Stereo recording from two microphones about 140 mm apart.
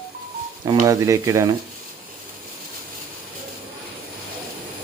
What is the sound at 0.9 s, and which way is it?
Speech, 25° right (ahead or behind).